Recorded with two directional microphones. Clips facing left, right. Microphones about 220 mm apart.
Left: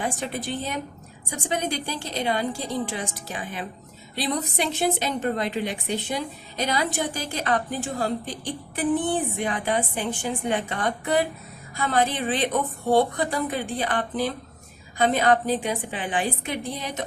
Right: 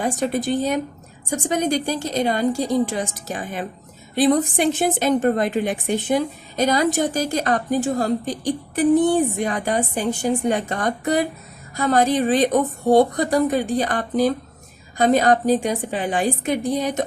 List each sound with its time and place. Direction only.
0.0 s a woman's voice: 40° right (ahead or behind)